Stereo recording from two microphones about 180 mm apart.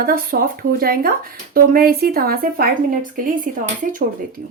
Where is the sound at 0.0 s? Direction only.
55° right (ahead or behind).